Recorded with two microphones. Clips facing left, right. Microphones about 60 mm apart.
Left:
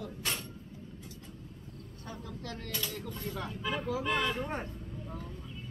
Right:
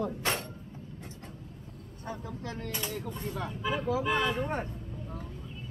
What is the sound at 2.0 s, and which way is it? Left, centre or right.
Speech, right.